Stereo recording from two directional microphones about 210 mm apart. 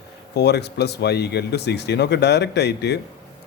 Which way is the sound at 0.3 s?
50° left (ahead or behind).